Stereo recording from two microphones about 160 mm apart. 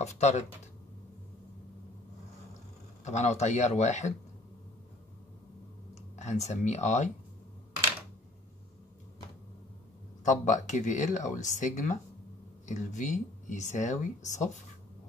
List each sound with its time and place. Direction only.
0.0 s speech: 45° left (ahead or behind)
3.1 s speech: 45° left (ahead or behind)
6.1 s speech: 45° left (ahead or behind)
10.2 s speech: 50° left (ahead or behind)